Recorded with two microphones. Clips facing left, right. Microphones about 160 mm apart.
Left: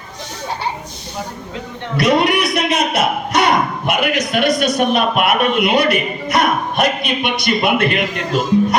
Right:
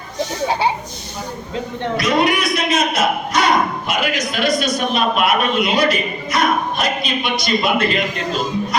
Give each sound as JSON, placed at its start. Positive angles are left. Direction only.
{"t": 2.0, "sound": "a man's voice", "side_deg": 60}